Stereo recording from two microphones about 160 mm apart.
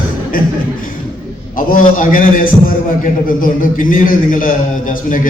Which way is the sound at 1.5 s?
55° left (ahead or behind).